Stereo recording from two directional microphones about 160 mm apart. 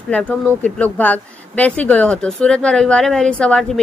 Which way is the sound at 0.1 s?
10° left (ahead or behind).